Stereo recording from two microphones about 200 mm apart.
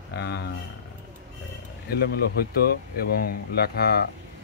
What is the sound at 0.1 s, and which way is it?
Speech, 55° left (ahead or behind).